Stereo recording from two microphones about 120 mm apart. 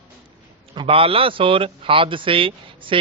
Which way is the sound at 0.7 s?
45° right (ahead or behind).